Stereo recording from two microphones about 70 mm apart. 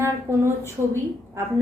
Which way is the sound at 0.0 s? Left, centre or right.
Right.